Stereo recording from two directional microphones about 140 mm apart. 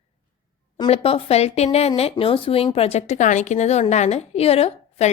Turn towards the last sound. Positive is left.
turn(degrees=45)  # may be behind; listen again after turning